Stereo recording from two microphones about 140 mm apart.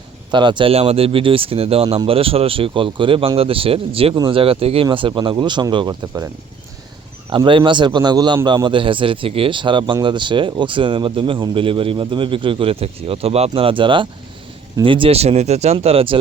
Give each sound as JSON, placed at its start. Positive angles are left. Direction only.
{"t": 0.3, "sound": "speech", "side_deg": -35}
{"t": 7.3, "sound": "speech", "side_deg": -35}